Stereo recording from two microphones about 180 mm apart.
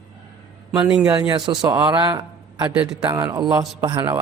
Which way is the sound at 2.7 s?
10° right (ahead or behind).